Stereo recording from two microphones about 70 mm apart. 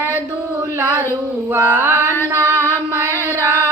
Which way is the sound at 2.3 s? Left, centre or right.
Right.